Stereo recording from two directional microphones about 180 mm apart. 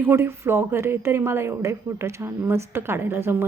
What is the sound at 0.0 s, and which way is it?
A woman's voice, 15° right (ahead or behind).